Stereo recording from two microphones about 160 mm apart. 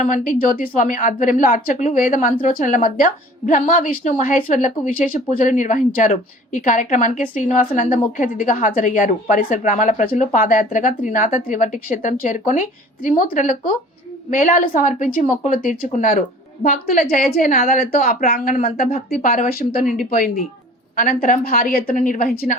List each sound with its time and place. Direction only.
0.0 s a woman's voice: 55° left (ahead or behind)
19.2 s speech: 50° left (ahead or behind)
19.5 s a woman's voice: 70° left (ahead or behind)